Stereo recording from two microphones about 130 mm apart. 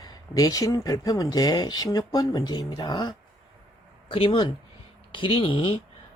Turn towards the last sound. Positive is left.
turn(degrees=45)  # may be behind; listen again after turning